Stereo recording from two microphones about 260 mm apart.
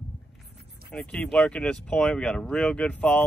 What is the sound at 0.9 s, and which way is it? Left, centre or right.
Speech, centre.